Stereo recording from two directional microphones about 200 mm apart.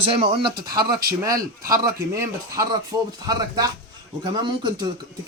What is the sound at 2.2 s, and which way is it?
Speech, 15° right (ahead or behind).